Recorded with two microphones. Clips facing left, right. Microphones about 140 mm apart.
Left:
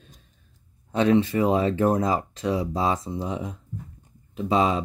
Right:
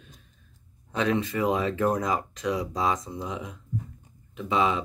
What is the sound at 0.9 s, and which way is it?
Speech, 30° left (ahead or behind).